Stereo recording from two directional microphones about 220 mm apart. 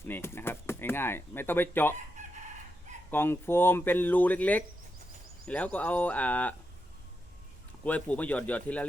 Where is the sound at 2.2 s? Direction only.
35° right (ahead or behind).